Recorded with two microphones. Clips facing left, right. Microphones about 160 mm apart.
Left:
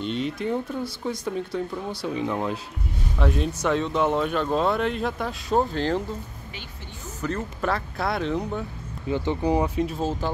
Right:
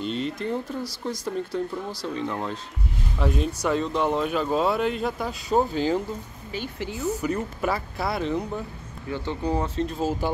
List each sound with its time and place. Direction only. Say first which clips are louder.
0.0 s speech: left 1 dB; centre (ahead or behind)
7.2 s speech: right 2 dB; 10° right (ahead or behind)
9.1 s speech: left 4 dB; 15° left (ahead or behind)
9.9 s speech: right 1 dB; 5° right (ahead or behind)